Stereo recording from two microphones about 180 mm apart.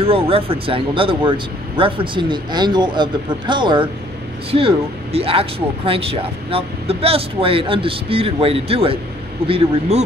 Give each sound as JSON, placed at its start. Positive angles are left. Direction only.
{"t": 0.0, "sound": "speech", "side_deg": -30}